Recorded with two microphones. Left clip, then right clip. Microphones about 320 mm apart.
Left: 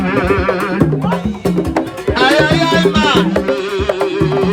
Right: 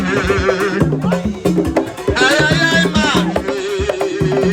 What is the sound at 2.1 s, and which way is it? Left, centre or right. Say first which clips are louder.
Music: left 2 dB; centre.